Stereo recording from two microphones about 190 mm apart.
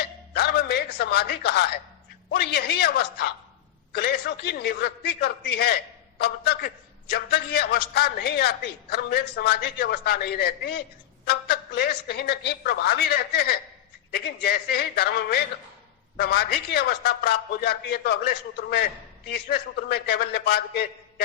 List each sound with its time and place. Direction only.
0.0 s music: 55° left (ahead or behind)
2.3 s a man's voice: 55° left (ahead or behind)